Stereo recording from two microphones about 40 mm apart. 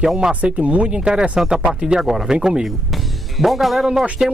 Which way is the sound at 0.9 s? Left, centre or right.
Right.